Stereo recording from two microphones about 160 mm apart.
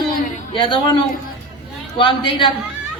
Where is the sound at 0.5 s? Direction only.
30° left (ahead or behind).